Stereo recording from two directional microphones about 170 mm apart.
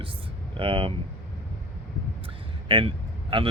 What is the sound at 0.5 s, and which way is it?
Speech, 30° right (ahead or behind).